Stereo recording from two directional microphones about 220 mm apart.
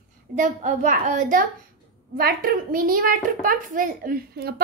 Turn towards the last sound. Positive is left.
turn(degrees=-45)  # may be behind; listen again after turning